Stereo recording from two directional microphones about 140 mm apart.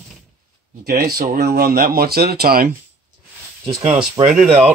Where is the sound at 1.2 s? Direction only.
90° right.